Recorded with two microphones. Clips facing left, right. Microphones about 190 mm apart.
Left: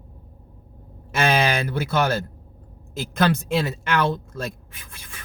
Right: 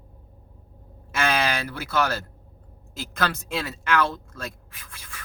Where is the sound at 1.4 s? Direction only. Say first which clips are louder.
Left 4 dB; 20° left (ahead or behind).